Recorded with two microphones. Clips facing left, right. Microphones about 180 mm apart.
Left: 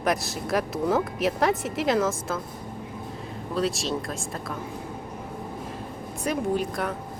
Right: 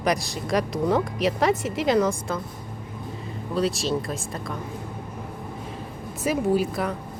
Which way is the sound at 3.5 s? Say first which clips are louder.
Right 2 dB; centre (ahead or behind).